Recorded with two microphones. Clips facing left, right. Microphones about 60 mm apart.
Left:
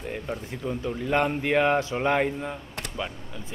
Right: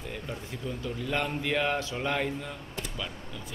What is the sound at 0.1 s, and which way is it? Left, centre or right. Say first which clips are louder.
A man's voice: left 6 dB; left.